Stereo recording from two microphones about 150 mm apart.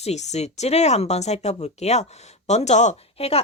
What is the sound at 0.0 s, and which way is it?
Speech, 50° left (ahead or behind).